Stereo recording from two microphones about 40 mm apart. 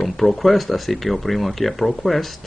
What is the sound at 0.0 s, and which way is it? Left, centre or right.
Speech, centre.